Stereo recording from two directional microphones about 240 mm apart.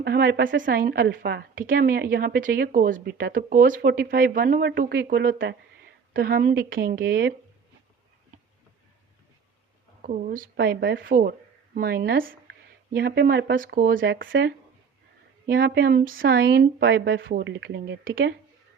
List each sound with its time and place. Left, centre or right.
0.0 s a woman's voice: right
10.0 s a woman's voice: right
14.0 s speech: right